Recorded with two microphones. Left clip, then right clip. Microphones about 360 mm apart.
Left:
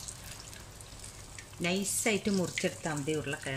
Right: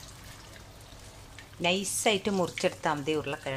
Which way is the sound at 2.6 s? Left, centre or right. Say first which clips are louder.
Right 6 dB; right.